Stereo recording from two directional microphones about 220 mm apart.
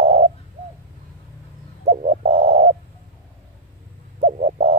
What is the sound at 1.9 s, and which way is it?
Bird, 30° right (ahead or behind).